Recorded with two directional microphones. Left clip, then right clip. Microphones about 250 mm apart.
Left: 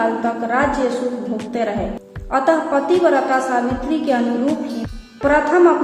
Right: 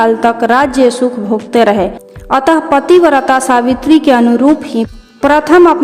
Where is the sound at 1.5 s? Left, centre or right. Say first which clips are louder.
Right 13 dB; right.